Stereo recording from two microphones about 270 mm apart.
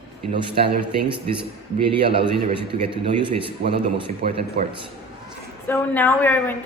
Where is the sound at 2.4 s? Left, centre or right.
Centre.